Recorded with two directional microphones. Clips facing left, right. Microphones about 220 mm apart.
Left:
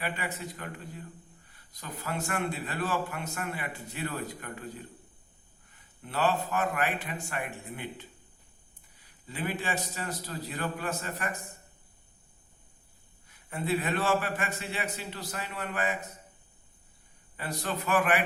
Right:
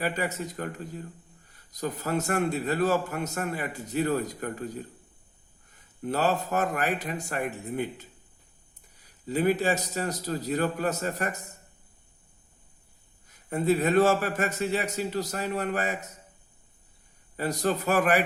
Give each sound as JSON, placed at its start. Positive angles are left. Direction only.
{"t": 0.0, "sound": "a man's voice", "side_deg": -40}
{"t": 13.2, "sound": "a man's voice", "side_deg": -40}
{"t": 17.3, "sound": "a man's voice", "side_deg": -40}